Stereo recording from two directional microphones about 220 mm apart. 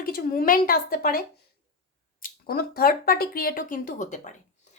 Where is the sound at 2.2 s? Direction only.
40° left (ahead or behind).